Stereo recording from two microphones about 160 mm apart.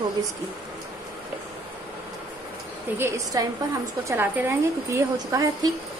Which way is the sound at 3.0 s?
20° right (ahead or behind).